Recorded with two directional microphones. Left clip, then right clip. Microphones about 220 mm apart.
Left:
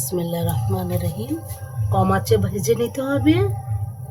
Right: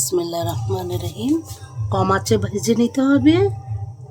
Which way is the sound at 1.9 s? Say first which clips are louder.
Right 1 dB; 50° right (ahead or behind).